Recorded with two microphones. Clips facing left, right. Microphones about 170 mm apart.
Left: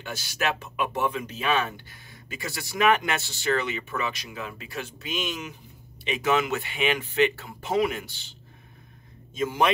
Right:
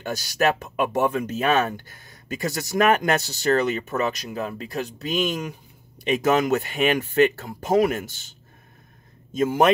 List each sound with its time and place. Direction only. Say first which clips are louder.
0.0 s speech: right 7 dB; 40° right (ahead or behind)